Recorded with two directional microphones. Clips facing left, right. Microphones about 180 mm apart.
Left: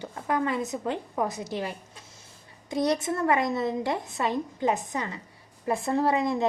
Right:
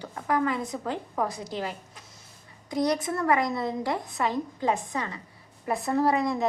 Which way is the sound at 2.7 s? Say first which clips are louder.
Even; 25° left (ahead or behind).